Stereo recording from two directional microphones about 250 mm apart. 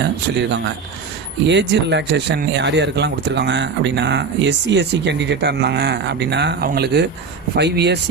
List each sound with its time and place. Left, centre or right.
0.0 s speech: right